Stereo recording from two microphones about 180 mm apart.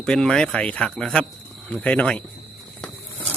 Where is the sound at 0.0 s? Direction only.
5° left (ahead or behind).